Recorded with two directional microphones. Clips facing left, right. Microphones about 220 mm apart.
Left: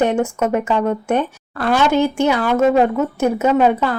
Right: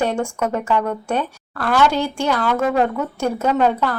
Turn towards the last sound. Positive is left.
turn(degrees=10)  # may be behind; listen again after turning